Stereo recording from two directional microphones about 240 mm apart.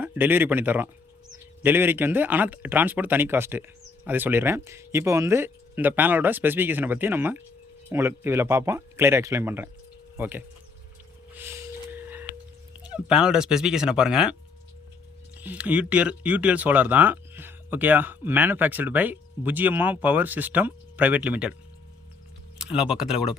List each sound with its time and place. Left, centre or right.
0.0 s speech: centre
11.3 s a sound: centre
15.4 s speech: centre
22.5 s speech: centre